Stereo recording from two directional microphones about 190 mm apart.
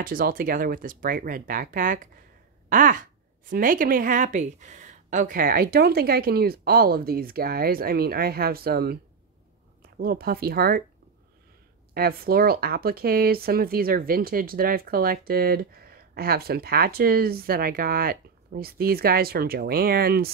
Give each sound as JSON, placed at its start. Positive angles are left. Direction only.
{"t": 0.0, "sound": "speech", "side_deg": -50}
{"t": 11.9, "sound": "speech", "side_deg": -55}